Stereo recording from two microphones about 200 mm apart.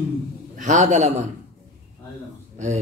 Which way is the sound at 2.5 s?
35° right (ahead or behind).